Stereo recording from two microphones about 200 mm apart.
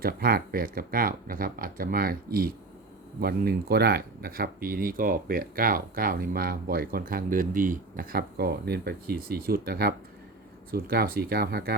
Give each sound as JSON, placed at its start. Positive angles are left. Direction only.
{"t": 0.0, "sound": "speech", "side_deg": -50}